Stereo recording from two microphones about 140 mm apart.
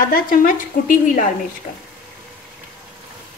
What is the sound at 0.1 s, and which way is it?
Speech, 75° left (ahead or behind).